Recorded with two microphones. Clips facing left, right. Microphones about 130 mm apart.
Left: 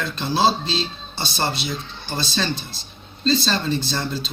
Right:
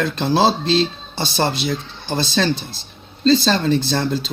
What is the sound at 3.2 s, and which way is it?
Speech, 85° right.